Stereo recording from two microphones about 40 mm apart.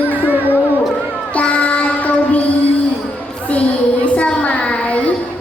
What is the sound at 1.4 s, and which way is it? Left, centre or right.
Child singing, left.